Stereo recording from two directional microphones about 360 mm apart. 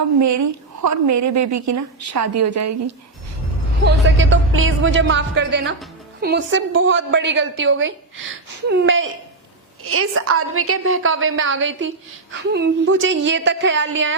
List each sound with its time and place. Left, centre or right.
0.2 s a woman's voice: right
3.8 s a woman's voice: right